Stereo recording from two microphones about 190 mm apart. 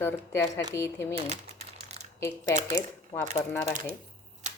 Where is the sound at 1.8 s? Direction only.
35° right (ahead or behind).